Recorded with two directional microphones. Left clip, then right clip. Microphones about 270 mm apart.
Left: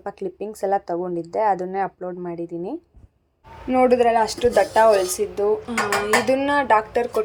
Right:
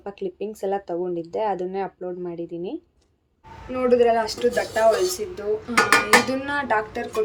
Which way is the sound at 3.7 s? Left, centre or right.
Centre.